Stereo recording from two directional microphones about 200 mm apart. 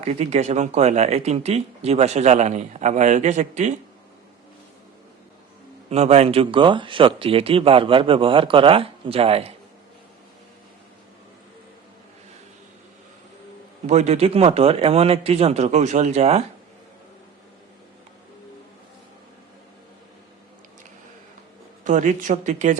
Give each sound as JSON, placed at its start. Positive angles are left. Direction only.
{"t": 0.0, "sound": "speech", "side_deg": -35}
{"t": 5.9, "sound": "speech", "side_deg": -30}
{"t": 13.8, "sound": "speech", "side_deg": -35}
{"t": 21.8, "sound": "speech", "side_deg": -40}